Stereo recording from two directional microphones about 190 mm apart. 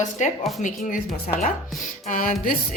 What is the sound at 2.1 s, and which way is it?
Speech, 45° left (ahead or behind).